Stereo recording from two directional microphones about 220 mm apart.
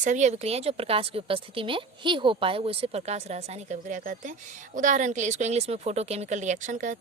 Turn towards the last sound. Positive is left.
turn(degrees=-35)  # may be behind; listen again after turning